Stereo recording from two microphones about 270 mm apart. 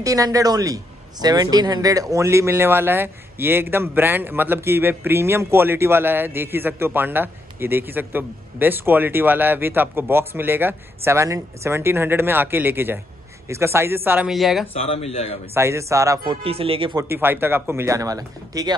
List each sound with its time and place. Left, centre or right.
0.0 s speech: centre
14.7 s speech: left
15.5 s speech: centre